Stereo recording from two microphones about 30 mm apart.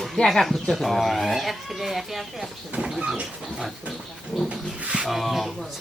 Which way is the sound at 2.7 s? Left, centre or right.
Right.